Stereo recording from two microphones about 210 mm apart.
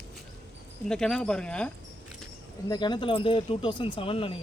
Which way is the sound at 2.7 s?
20° left (ahead or behind).